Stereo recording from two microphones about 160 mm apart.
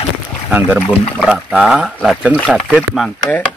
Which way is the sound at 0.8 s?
5° left (ahead or behind).